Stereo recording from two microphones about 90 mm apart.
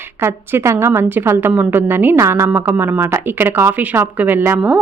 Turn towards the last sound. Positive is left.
turn(degrees=-20)  # may be behind; listen again after turning